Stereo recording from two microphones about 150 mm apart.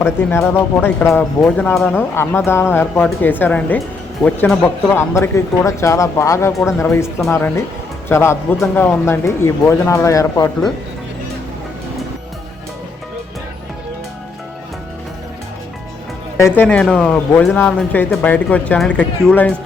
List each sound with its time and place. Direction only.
0.0 s speech: 15° left (ahead or behind)
16.4 s speech: 10° left (ahead or behind)